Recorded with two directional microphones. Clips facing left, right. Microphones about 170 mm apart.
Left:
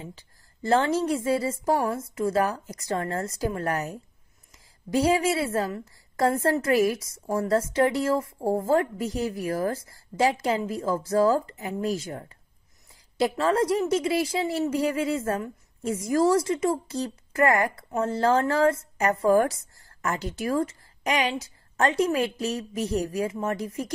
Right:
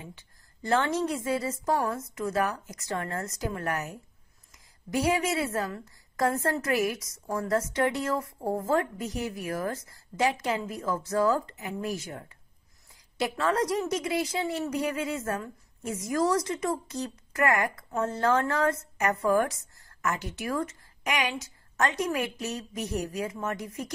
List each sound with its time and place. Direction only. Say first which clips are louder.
0.6 s a woman's voice: left 4 dB; 30° left (ahead or behind)
4.9 s a woman's voice: left 4 dB; 30° left (ahead or behind)